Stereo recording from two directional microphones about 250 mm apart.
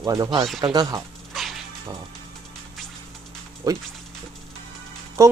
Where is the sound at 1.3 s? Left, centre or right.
Centre.